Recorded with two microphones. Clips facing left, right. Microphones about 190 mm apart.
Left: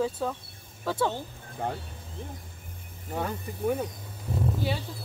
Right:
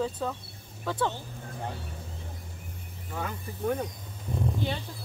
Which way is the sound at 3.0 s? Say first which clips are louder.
Left 4 dB; 30° left (ahead or behind).